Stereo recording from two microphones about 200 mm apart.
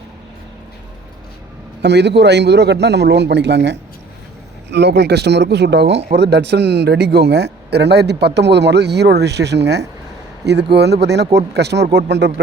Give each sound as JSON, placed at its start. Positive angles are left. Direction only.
{"t": 1.8, "sound": "speech", "side_deg": -60}